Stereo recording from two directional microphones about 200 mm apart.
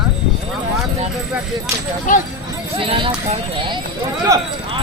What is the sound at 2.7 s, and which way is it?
Speech, 25° right (ahead or behind).